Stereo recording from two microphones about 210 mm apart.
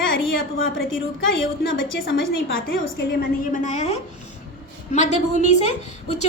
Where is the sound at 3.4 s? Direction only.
40° left (ahead or behind).